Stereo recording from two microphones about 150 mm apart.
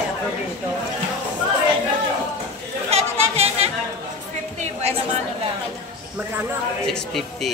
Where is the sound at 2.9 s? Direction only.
45° right (ahead or behind).